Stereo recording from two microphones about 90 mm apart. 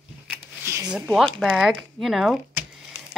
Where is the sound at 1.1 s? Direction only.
5° left (ahead or behind).